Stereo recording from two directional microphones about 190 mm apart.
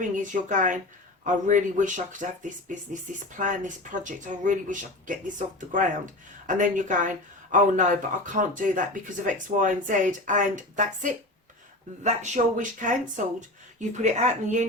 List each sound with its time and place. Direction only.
0.2 s speech: 40° right (ahead or behind)